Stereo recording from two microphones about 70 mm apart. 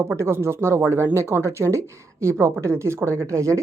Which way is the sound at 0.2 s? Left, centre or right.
Right.